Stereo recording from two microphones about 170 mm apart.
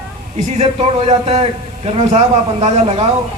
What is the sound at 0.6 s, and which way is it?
Speech, 40° right (ahead or behind).